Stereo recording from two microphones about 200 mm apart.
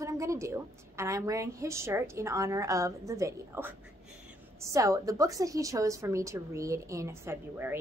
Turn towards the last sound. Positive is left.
turn(degrees=-10)  # may be behind; listen again after turning